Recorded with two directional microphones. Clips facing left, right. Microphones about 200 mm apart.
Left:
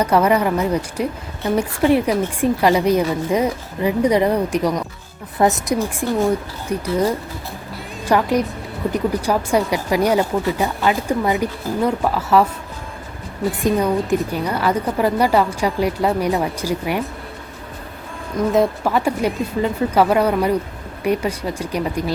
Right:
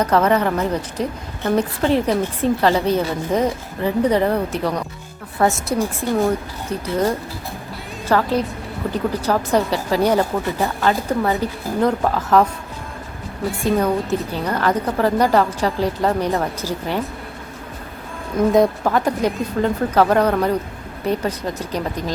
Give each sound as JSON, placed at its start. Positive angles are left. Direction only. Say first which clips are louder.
{"t": 0.0, "sound": "speech", "louder": "left 1 dB", "side_deg": 10}
{"t": 13.6, "sound": "speech", "louder": "even", "side_deg": 15}
{"t": 18.5, "sound": "speech", "louder": "even", "side_deg": 5}